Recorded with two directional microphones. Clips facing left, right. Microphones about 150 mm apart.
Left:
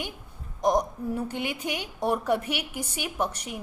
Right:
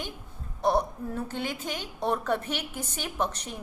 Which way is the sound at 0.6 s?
15° left (ahead or behind).